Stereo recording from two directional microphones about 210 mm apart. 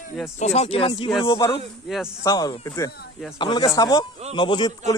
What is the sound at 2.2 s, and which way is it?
A man's voice, 15° left (ahead or behind).